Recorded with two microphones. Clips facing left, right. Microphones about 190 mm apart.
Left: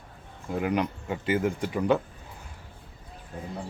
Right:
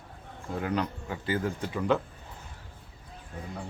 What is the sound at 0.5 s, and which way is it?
Speech, 15° left (ahead or behind).